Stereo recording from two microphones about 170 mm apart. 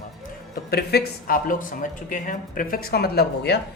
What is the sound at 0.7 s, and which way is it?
A man's voice, 70° left (ahead or behind).